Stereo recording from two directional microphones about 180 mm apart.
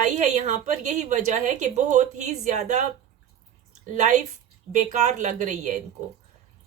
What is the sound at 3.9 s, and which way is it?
A woman's voice, 40° right (ahead or behind).